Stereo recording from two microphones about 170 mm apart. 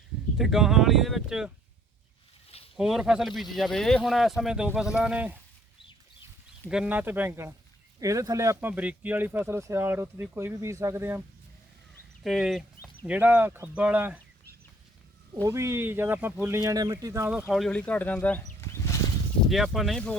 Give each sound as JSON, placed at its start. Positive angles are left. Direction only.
{"t": 0.3, "sound": "speech", "side_deg": 0}
{"t": 2.7, "sound": "speech", "side_deg": 0}
{"t": 6.7, "sound": "speech", "side_deg": -5}
{"t": 12.2, "sound": "speech", "side_deg": 0}
{"t": 15.4, "sound": "speech", "side_deg": -15}
{"t": 17.5, "sound": "speech", "side_deg": 5}
{"t": 18.6, "sound": "a sound", "side_deg": 15}
{"t": 19.5, "sound": "speech", "side_deg": 0}